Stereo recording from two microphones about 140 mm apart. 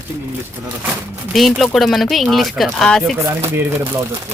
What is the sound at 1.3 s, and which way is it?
Speech, centre (ahead or behind).